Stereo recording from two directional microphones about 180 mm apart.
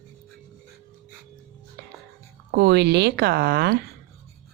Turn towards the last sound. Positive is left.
turn(degrees=-60)  # may be behind; listen again after turning